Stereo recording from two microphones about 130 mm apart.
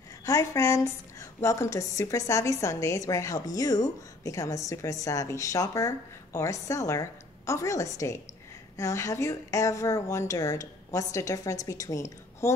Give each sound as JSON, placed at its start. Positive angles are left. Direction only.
{"t": 0.2, "sound": "a woman's voice", "side_deg": 25}